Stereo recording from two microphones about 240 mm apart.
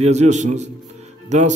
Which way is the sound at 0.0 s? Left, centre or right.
Right.